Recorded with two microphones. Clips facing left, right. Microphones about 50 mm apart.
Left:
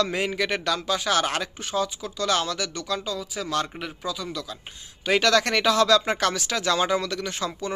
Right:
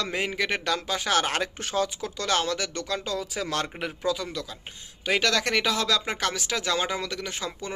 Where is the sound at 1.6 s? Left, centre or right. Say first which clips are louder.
Even; right.